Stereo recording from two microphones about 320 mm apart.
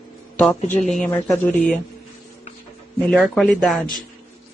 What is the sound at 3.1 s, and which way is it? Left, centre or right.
Speech, centre.